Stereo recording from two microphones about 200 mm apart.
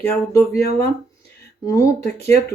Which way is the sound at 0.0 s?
10° left (ahead or behind).